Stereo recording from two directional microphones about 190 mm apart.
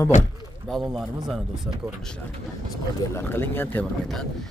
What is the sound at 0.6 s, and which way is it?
Speech, centre (ahead or behind).